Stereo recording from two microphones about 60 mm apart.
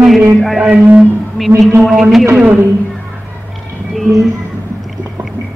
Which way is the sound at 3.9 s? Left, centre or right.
Centre.